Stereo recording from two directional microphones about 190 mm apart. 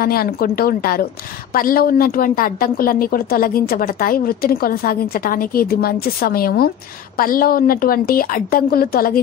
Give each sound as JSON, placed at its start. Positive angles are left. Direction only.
{"t": 0.0, "sound": "a woman's voice", "side_deg": 50}